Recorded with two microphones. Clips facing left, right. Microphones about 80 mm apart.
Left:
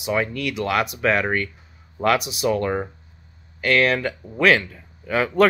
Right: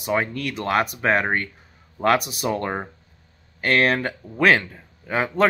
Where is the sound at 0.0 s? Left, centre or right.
Right.